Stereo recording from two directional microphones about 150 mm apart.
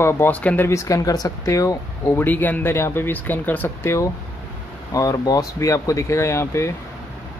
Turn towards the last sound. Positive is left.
turn(degrees=20)  # may be behind; listen again after turning